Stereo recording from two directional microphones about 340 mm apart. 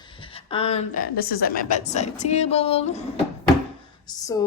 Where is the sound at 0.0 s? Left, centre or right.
Centre.